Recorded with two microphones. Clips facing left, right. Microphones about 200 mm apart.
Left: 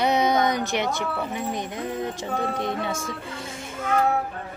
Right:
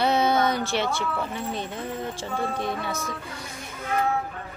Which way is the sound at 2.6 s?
20° left (ahead or behind).